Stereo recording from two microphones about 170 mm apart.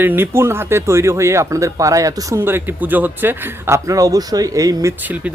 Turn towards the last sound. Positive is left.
turn(degrees=-10)  # may be behind; listen again after turning